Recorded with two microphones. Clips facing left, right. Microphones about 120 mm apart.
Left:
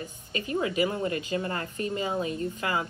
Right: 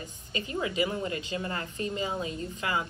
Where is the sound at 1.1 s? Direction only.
25° right (ahead or behind).